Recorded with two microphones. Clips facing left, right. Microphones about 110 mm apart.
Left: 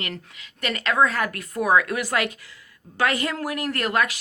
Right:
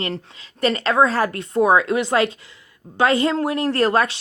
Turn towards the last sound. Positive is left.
turn(degrees=-30)  # may be behind; listen again after turning